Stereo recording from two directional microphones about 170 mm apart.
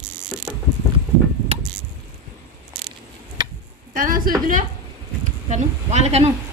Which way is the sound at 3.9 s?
55° right (ahead or behind).